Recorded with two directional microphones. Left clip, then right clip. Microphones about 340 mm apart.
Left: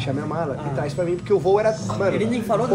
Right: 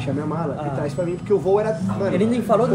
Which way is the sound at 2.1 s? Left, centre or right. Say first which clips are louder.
Right 4 dB; centre.